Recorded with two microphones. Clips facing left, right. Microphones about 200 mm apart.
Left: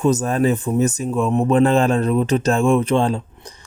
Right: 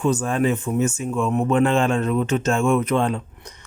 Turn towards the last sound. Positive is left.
turn(degrees=30)  # may be behind; listen again after turning